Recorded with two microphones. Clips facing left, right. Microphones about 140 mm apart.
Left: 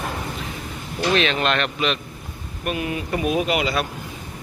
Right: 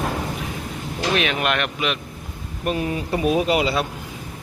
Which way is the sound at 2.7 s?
30° right (ahead or behind).